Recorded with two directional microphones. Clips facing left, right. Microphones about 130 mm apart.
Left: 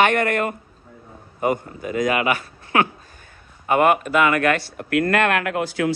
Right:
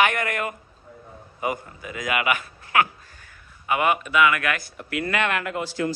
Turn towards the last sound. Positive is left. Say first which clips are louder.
# left 4 dB
turn(degrees=65)  # may be behind; listen again after turning